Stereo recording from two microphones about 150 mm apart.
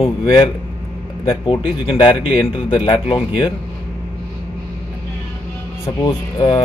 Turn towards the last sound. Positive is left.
turn(degrees=30)  # may be behind; listen again after turning